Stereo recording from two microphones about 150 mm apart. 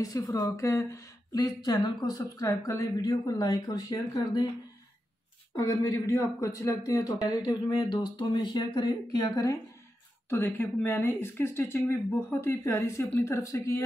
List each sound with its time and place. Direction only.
0.0 s a woman's voice: 25° left (ahead or behind)
5.6 s a woman's voice: 20° left (ahead or behind)